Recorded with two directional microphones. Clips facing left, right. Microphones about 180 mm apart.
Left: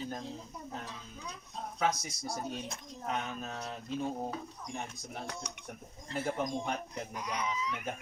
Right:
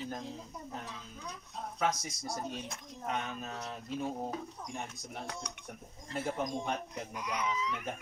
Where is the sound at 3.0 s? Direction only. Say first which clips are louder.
Even; centre (ahead or behind).